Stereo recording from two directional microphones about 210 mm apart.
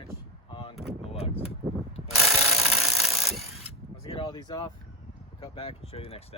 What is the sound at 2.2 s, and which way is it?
Rub, centre (ahead or behind).